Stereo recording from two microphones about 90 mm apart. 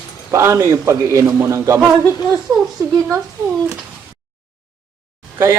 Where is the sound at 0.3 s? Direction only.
30° right (ahead or behind).